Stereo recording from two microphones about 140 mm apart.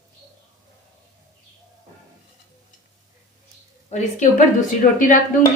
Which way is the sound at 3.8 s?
60° left (ahead or behind).